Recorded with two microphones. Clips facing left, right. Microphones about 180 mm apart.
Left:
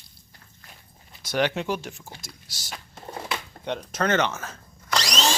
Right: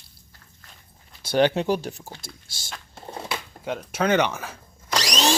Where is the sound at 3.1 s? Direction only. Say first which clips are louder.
Even; 10° right (ahead or behind).